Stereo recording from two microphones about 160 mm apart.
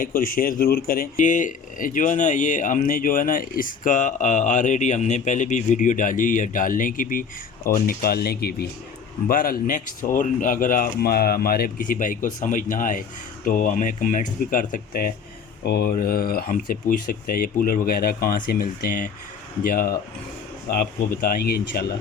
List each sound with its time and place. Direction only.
0.0 s speech: 65° left (ahead or behind)
8.0 s speech: 75° left (ahead or behind)
9.2 s speech: 65° left (ahead or behind)
15.6 s speech: 80° left